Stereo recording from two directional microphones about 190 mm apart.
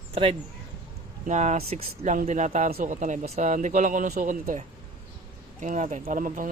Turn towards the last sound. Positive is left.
turn(degrees=-45)  # may be behind; listen again after turning